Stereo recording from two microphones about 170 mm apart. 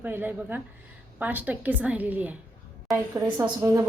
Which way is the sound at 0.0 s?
10° right (ahead or behind).